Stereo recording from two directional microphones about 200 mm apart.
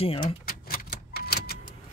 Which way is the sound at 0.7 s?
50° left (ahead or behind).